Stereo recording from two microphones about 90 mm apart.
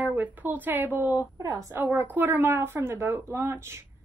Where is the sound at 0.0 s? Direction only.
20° right (ahead or behind).